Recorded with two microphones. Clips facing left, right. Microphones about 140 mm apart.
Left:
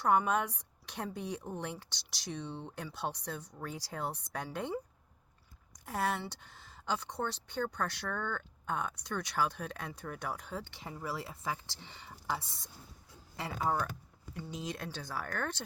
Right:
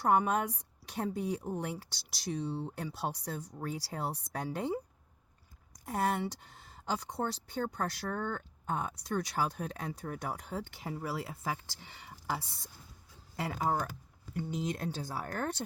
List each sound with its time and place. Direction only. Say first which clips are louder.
0.0 s a woman's voice: right 1 dB; 40° right (ahead or behind)
2.3 s speech: right 5 dB; 35° right (ahead or behind)
5.8 s speech: right 3 dB; 35° right (ahead or behind)
14.3 s speech: right 5 dB; 55° right (ahead or behind)
14.9 s speech: right 1 dB; 35° right (ahead or behind)